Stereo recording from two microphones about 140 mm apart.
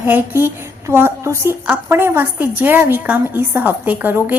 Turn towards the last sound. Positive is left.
turn(degrees=-10)  # may be behind; listen again after turning